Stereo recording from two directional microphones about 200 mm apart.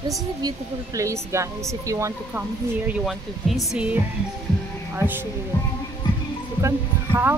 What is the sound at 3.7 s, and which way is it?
Music, 5° right (ahead or behind).